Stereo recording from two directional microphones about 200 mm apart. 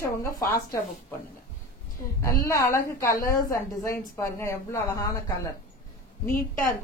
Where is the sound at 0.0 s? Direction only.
15° left (ahead or behind).